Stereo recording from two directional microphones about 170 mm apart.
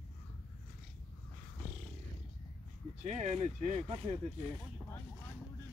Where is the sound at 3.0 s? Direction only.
40° right (ahead or behind).